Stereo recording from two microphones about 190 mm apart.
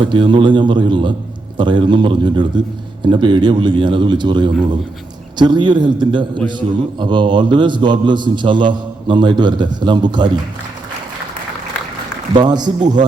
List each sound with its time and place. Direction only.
0.0 s a man's voice: 25° right (ahead or behind)
12.3 s a man's voice: 20° right (ahead or behind)